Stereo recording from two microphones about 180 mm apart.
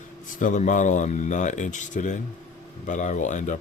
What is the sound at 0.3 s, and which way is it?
Speech, 45° left (ahead or behind).